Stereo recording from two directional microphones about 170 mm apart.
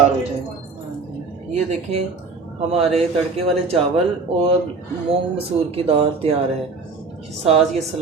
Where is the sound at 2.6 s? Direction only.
35° right (ahead or behind).